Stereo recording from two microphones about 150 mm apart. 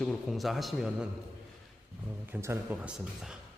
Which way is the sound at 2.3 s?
15° right (ahead or behind).